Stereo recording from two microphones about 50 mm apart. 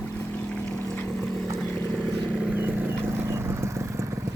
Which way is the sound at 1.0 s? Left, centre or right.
Centre.